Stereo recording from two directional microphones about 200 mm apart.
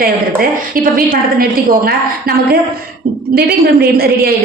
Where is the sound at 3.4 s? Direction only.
50° right (ahead or behind).